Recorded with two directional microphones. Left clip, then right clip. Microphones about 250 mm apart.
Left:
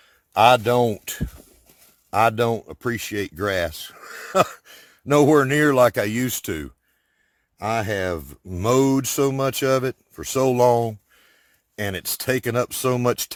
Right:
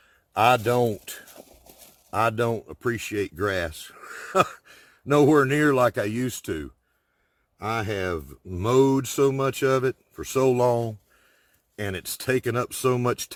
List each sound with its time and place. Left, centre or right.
0.0 s a man's voice: left